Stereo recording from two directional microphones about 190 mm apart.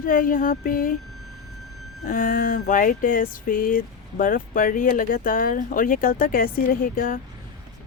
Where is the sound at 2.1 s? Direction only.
45° left (ahead or behind).